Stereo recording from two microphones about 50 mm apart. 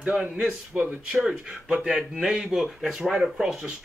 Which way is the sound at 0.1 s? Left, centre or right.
Centre.